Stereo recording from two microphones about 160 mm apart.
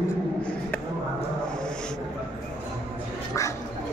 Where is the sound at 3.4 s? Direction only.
20° left (ahead or behind).